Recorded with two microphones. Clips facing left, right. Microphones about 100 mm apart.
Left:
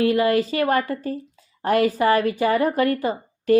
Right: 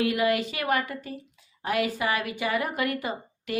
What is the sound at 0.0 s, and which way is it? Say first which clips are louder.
A woman's voice: left 6 dB; 35° left (ahead or behind).